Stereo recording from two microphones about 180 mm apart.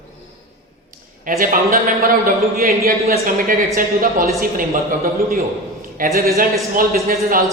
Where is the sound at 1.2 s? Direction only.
50° right (ahead or behind).